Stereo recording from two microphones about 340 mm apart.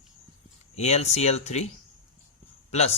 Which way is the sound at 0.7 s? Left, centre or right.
Centre.